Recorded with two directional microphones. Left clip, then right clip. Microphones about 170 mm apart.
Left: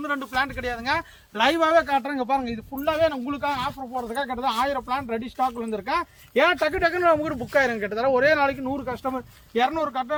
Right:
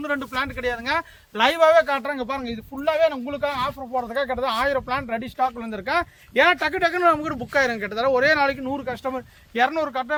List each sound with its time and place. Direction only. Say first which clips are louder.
0.0 s a man's voice: even; 15° right (ahead or behind)
1.4 s speech: right 3 dB; 35° right (ahead or behind)